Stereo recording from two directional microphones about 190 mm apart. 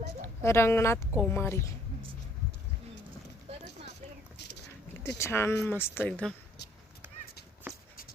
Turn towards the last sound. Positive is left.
turn(degrees=5)  # may be behind; listen again after turning